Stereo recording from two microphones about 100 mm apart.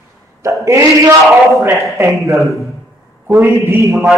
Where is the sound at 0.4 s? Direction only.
30° right (ahead or behind).